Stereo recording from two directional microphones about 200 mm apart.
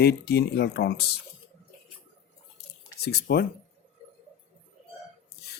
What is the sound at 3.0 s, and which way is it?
Speech, 55° left (ahead or behind).